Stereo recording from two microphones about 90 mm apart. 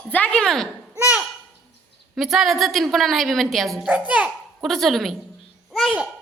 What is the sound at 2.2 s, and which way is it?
A woman's voice, centre (ahead or behind).